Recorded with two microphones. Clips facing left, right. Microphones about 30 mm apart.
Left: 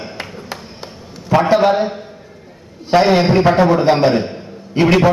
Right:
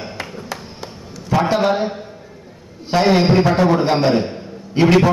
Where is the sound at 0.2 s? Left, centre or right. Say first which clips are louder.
Even; left.